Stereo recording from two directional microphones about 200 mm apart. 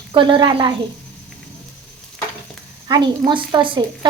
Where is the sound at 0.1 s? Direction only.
25° right (ahead or behind).